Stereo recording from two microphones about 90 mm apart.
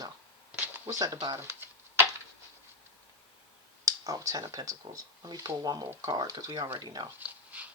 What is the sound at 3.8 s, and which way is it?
Speech, 40° right (ahead or behind).